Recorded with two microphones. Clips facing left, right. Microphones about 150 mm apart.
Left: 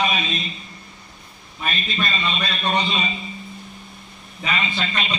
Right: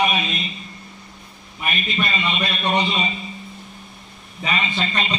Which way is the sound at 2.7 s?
20° right (ahead or behind).